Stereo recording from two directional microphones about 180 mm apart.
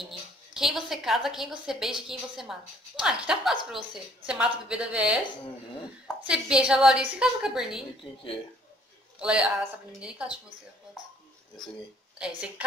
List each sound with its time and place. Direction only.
0.0 s a woman's voice: centre (ahead or behind)
6.2 s a woman's voice: 5° right (ahead or behind)
8.0 s speech: 30° left (ahead or behind)
9.2 s a woman's voice: 5° right (ahead or behind)
12.2 s a woman's voice: 5° right (ahead or behind)